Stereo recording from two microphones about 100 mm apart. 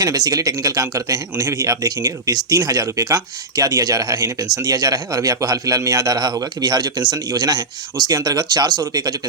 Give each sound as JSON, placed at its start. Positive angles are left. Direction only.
{"t": 0.0, "sound": "a man's voice", "side_deg": -40}